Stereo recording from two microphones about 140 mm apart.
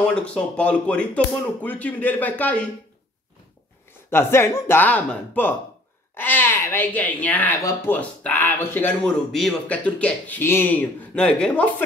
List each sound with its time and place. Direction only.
0.0 s speech: 5° left (ahead or behind)
4.1 s speech: 15° left (ahead or behind)